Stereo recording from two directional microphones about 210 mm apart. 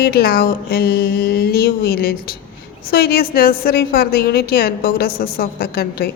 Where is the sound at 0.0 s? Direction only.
45° left (ahead or behind).